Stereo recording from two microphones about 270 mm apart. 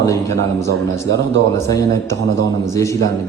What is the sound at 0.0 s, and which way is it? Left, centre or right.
A man's voice, centre.